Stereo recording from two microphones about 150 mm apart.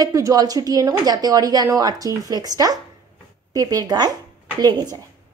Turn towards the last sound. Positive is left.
turn(degrees=-25)  # may be behind; listen again after turning